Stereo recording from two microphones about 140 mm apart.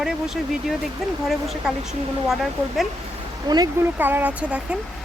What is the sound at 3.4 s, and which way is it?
Speech, 30° right (ahead or behind).